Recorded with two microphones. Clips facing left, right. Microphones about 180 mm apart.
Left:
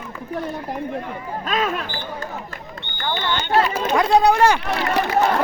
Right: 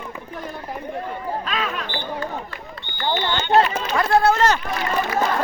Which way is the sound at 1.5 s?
45° left (ahead or behind).